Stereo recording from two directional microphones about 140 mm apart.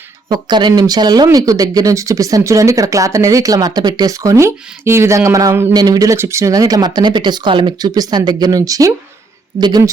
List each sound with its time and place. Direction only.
0.3 s speech: 30° right (ahead or behind)